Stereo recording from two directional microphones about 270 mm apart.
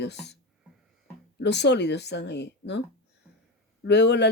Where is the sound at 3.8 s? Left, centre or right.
Left.